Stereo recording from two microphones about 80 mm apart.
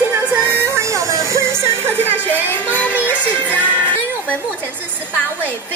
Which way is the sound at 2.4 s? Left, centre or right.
Left.